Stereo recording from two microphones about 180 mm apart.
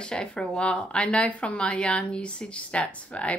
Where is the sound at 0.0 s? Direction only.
5° left (ahead or behind).